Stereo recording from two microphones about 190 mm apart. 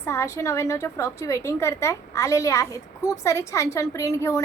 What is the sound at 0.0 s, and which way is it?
A woman's voice, 15° left (ahead or behind).